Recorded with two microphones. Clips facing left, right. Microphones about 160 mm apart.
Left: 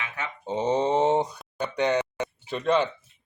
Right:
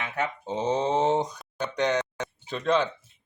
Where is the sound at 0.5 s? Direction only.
10° left (ahead or behind).